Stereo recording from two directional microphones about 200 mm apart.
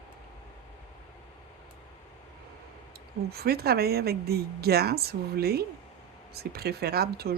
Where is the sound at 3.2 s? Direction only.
50° right (ahead or behind).